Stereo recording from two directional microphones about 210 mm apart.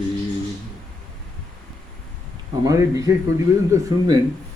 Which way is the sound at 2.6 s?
15° right (ahead or behind).